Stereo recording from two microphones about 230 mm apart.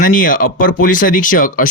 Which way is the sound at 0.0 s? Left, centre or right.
Left.